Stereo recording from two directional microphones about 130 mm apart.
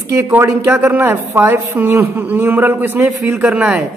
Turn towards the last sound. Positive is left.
turn(degrees=-5)  # may be behind; listen again after turning